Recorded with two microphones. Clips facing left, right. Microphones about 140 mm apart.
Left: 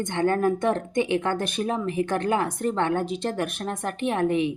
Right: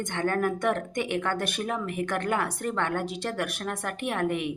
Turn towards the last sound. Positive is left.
turn(degrees=25)  # may be behind; listen again after turning